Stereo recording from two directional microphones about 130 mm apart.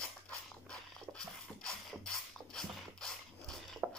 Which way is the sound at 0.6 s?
5° left (ahead or behind).